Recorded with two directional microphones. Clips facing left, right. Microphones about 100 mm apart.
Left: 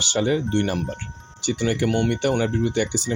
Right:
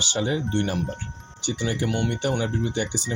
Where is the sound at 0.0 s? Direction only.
65° left (ahead or behind).